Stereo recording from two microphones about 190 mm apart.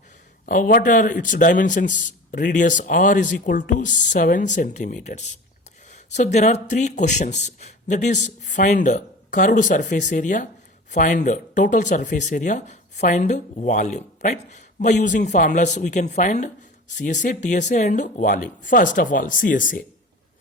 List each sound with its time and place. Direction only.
0.4 s a man's voice: 45° left (ahead or behind)